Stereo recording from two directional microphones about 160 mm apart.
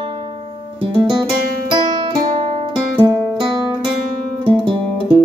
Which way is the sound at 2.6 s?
30° right (ahead or behind).